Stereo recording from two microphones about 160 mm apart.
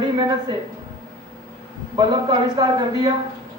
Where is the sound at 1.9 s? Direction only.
30° right (ahead or behind).